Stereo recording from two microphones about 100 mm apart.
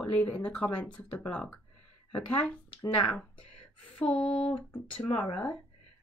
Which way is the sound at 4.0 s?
10° left (ahead or behind).